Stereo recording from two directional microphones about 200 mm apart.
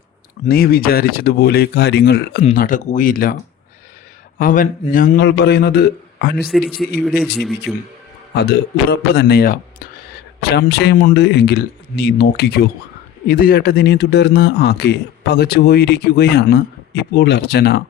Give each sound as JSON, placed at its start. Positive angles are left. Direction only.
{"t": 0.4, "sound": "speech", "side_deg": 50}
{"t": 2.4, "sound": "speech", "side_deg": 40}
{"t": 4.4, "sound": "speech", "side_deg": 45}
{"t": 6.4, "sound": "speech", "side_deg": -5}
{"t": 7.7, "sound": "speech", "side_deg": 0}
{"t": 8.4, "sound": "speech", "side_deg": 55}